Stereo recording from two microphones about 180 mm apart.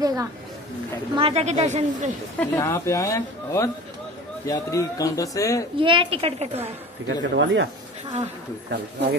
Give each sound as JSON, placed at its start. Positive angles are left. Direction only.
{"t": 0.0, "sound": "speech", "side_deg": -20}
{"t": 1.1, "sound": "a woman's voice", "side_deg": -35}
{"t": 2.4, "sound": "speech", "side_deg": 15}
{"t": 5.8, "sound": "a woman's voice", "side_deg": -30}
{"t": 7.1, "sound": "speech", "side_deg": -90}